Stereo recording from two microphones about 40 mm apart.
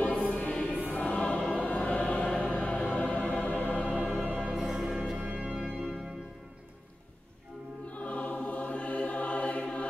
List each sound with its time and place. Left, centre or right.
0.0 s choir: left
1.6 s music: left
4.1 s music: right
4.6 s music: centre
5.1 s music: right
5.5 s organ: centre
8.0 s choir: left